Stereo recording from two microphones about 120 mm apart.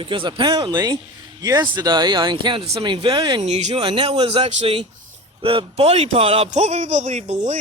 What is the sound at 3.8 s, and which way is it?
A man's voice, 45° right (ahead or behind).